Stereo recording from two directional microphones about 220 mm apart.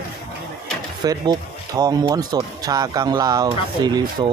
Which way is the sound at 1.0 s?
20° right (ahead or behind).